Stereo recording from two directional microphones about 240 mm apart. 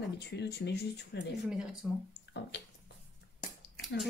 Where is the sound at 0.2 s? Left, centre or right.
Left.